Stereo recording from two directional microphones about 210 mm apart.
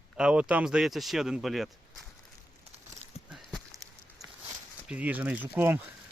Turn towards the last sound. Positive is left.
turn(degrees=-10)  # may be behind; listen again after turning